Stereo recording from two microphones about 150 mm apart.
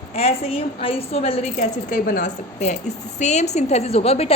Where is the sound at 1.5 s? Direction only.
55° left (ahead or behind).